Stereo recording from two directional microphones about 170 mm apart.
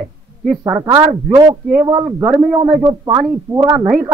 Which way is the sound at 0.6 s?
20° right (ahead or behind).